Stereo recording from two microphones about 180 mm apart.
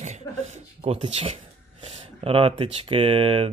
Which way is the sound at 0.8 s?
30° right (ahead or behind).